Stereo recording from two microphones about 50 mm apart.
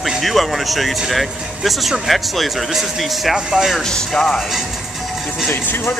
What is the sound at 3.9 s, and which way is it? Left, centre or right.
Speech, centre.